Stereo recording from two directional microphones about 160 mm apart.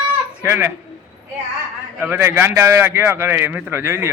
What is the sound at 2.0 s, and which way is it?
A man's voice, 15° right (ahead or behind).